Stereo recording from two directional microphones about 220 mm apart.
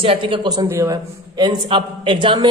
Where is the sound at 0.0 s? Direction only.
25° right (ahead or behind).